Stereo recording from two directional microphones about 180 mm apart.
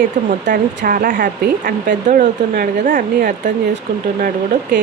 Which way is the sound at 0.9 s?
50° right (ahead or behind).